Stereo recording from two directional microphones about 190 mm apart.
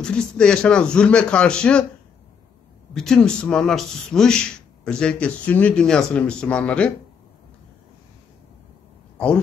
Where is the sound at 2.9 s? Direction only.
5° left (ahead or behind).